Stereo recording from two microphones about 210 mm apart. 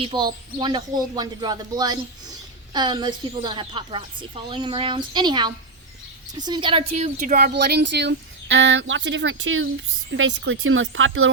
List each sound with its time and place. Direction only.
0.0 s speech: 20° right (ahead or behind); by 11.3 s 70° right (ahead or behind)